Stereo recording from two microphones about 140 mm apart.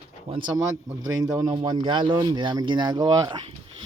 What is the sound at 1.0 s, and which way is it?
Speech, 25° right (ahead or behind).